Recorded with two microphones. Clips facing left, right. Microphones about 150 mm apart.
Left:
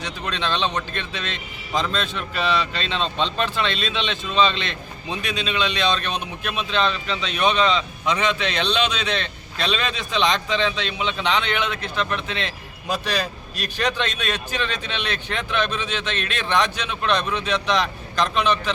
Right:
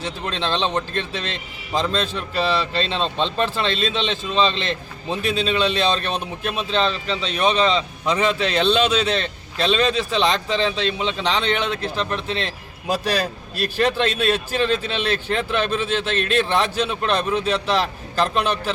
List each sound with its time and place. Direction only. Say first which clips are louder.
0.0 s a man's voice: right 2 dB; 30° right (ahead or behind)